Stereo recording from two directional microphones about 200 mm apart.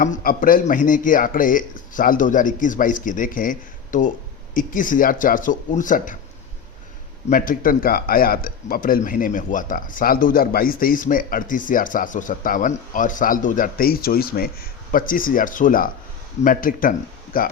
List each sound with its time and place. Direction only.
0.0 s speech: 45° left (ahead or behind)
7.3 s speech: 45° left (ahead or behind)